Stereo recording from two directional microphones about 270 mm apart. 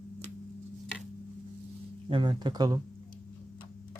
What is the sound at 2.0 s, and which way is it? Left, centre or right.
Speech, centre.